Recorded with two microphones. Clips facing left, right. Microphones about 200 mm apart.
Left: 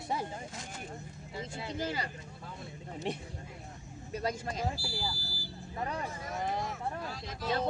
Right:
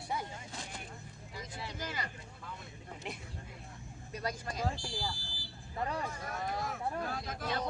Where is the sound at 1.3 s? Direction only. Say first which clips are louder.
Left 6 dB; 25° left (ahead or behind).